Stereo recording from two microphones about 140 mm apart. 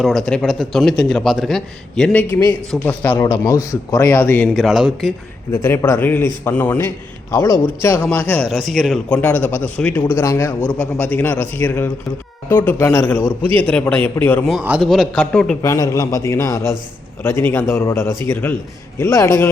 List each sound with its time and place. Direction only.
0.0 s a man's voice: centre (ahead or behind)
2.8 s a man's voice: 15° left (ahead or behind)
3.2 s a man's voice: 25° left (ahead or behind)
4.4 s a man's voice: centre (ahead or behind)
5.5 s a man's voice: 20° left (ahead or behind); by 9.0 s centre (ahead or behind)
9.0 s a man's voice: 10° left (ahead or behind)
14.8 s a man's voice: centre (ahead or behind)
15.6 s a man's voice: 25° left (ahead or behind)